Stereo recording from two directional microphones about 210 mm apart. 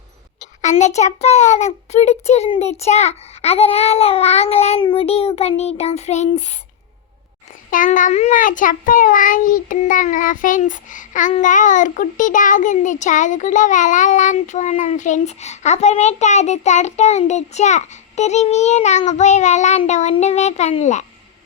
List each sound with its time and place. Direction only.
0.6 s a child's voice: 35° left (ahead or behind)
7.7 s a child's voice: 40° left (ahead or behind)